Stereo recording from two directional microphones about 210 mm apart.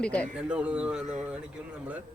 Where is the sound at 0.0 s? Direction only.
5° left (ahead or behind).